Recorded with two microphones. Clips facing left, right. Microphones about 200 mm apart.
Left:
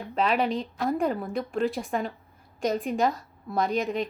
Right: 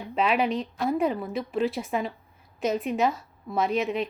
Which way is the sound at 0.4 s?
30° left (ahead or behind).